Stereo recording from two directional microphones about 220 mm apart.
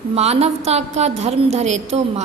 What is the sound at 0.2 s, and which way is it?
A woman's voice, 30° right (ahead or behind).